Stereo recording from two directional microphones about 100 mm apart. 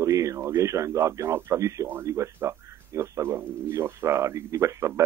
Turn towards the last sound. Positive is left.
turn(degrees=-30)  # may be behind; listen again after turning